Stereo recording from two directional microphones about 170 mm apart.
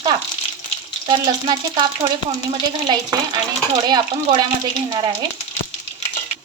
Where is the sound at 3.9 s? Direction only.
25° right (ahead or behind).